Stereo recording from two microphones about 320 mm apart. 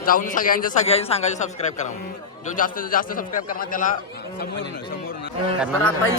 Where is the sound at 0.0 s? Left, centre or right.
Left.